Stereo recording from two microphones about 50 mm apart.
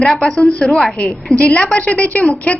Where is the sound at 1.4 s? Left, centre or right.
Left.